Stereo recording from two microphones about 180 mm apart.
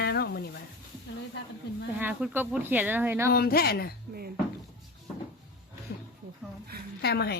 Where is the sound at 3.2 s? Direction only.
60° left (ahead or behind).